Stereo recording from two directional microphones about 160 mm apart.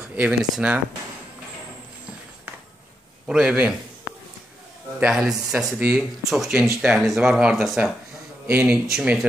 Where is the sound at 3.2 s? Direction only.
5° right (ahead or behind).